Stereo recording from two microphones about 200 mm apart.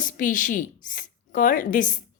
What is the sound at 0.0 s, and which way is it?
A woman's voice, 40° left (ahead or behind).